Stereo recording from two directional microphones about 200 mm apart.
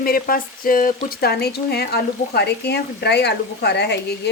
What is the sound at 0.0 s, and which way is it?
Speech, 45° left (ahead or behind).